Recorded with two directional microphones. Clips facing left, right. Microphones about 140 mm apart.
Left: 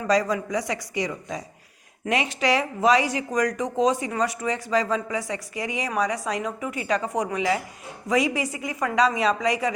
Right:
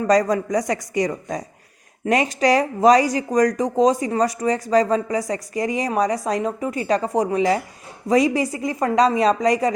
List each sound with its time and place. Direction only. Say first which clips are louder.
0.1 s speech: right 4 dB; 45° right (ahead or behind)